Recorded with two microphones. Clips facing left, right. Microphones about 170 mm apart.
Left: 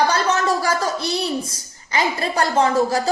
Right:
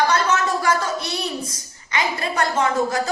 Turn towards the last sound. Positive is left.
turn(degrees=35)  # may be behind; listen again after turning